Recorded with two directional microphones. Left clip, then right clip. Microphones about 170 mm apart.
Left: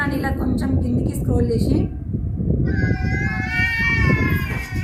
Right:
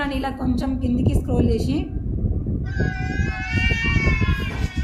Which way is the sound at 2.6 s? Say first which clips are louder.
Left 1 dB; 10° right (ahead or behind).